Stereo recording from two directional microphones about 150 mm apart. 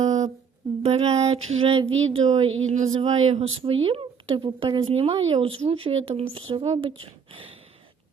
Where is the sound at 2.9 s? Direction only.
40° right (ahead or behind).